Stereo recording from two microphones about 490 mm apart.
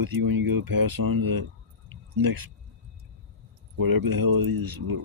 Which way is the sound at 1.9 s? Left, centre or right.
Right.